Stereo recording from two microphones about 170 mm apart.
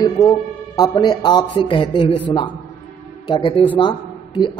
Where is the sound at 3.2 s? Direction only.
30° left (ahead or behind).